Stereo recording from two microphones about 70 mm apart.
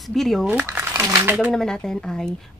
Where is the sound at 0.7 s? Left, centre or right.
Right.